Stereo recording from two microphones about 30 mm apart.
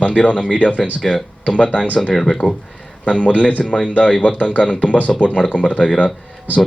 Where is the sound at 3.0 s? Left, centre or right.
Left.